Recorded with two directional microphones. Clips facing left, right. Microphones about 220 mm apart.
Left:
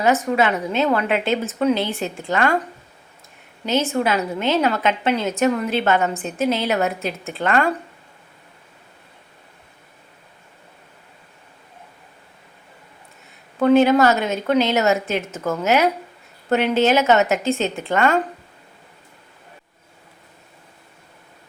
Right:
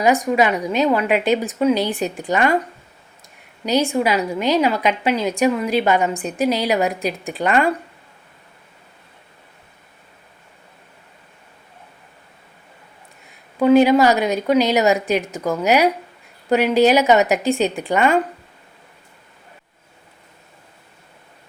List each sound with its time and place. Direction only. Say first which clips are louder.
0.0 s a woman's voice: right 2 dB; 15° right (ahead or behind)
3.7 s a woman's voice: right 2 dB; 15° right (ahead or behind)
13.6 s a woman's voice: right 2 dB; 10° right (ahead or behind)